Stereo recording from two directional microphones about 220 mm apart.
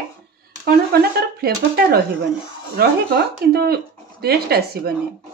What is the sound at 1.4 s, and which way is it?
Speech, 45° right (ahead or behind).